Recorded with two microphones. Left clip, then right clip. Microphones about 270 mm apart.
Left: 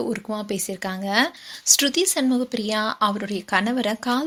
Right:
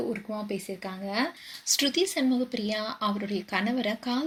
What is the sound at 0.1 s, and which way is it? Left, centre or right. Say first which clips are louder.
Speech: left 5 dB; left.